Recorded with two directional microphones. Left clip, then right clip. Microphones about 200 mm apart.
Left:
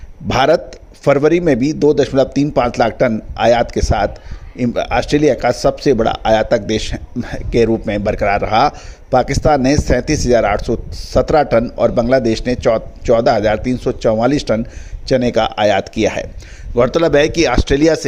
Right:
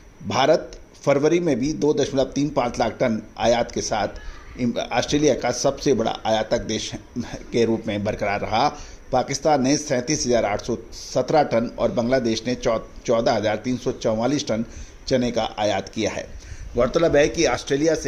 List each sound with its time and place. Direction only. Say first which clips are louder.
0.3 s a man's voice: left 6 dB; 45° left (ahead or behind)